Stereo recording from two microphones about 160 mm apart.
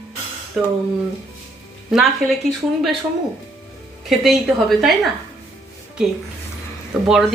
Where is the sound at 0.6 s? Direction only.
Centre (ahead or behind).